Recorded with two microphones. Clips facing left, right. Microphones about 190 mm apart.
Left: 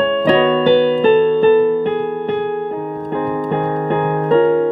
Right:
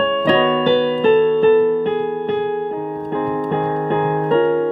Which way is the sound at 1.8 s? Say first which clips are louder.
Left 1 dB; 55° left (ahead or behind).